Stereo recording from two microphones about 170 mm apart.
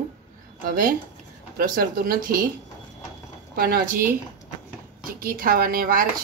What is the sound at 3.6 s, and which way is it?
Speech, 60° right (ahead or behind).